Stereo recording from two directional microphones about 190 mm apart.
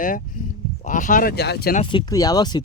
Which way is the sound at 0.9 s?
40° left (ahead or behind).